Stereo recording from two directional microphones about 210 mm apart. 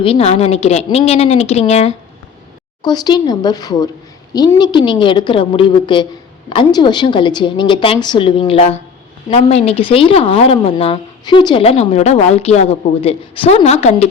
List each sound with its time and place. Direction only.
0.0 s a woman's voice: 30° left (ahead or behind)
2.8 s a woman's voice: 20° left (ahead or behind)